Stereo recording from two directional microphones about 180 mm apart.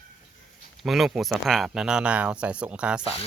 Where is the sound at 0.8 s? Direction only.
Centre (ahead or behind).